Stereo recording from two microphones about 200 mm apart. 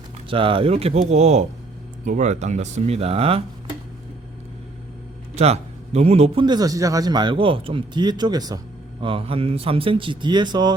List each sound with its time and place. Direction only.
0.3 s a man's voice: 25° right (ahead or behind)
5.3 s a man's voice: 30° right (ahead or behind)